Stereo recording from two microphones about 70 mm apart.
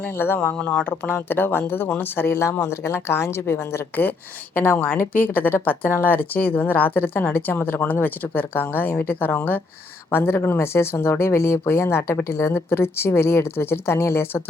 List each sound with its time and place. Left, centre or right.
0.0 s speech: left
0.3 s speech: centre
1.0 s speech: left